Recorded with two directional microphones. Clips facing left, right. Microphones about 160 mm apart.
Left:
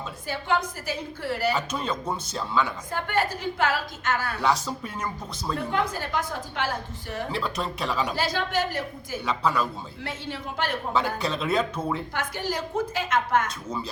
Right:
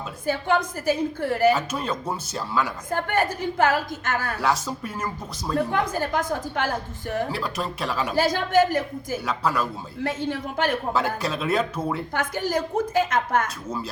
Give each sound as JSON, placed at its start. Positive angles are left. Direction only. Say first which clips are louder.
{"t": 0.3, "sound": "a woman's voice", "louder": "right 4 dB", "side_deg": -50}
{"t": 1.5, "sound": "speech", "louder": "right 1 dB", "side_deg": -5}
{"t": 2.9, "sound": "a woman's voice", "louder": "right 4 dB", "side_deg": -45}
{"t": 4.4, "sound": "speech", "louder": "right 1 dB", "side_deg": -5}
{"t": 5.7, "sound": "a woman's voice", "louder": "right 3 dB", "side_deg": -45}
{"t": 7.3, "sound": "speech", "louder": "right 1 dB", "side_deg": -5}
{"t": 8.1, "sound": "a woman's voice", "louder": "right 6 dB", "side_deg": -45}
{"t": 9.2, "sound": "speech", "louder": "left 1 dB", "side_deg": -5}
{"t": 10.0, "sound": "a woman's voice", "louder": "right 9 dB", "side_deg": -45}
{"t": 10.9, "sound": "speech", "louder": "right 1 dB", "side_deg": -5}
{"t": 12.1, "sound": "a woman's voice", "louder": "right 4 dB", "side_deg": -45}